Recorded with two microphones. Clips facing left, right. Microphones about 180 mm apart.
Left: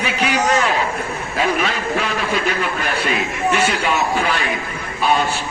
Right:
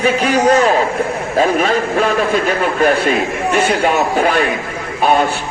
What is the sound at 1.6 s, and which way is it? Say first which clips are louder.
A man's voice: right 6 dB; 45° right (ahead or behind).